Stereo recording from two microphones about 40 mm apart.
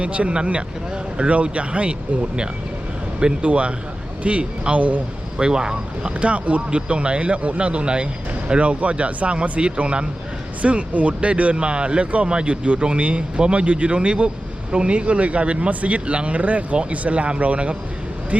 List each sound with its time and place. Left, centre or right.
0.0 s speech: right
5.4 s speech: centre
6.1 s speech: right